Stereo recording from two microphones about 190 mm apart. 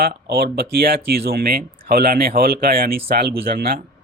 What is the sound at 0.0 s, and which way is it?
Speech, 55° right (ahead or behind).